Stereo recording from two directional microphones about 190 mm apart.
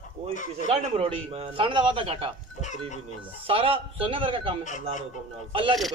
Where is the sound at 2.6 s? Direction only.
40° left (ahead or behind).